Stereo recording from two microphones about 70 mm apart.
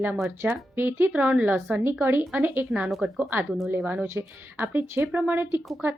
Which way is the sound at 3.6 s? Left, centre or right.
Right.